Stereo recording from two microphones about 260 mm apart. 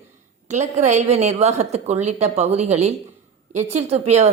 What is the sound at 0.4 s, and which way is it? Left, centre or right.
A woman's voice, right.